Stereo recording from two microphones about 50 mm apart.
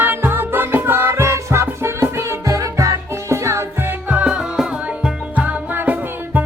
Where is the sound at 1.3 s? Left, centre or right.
Right.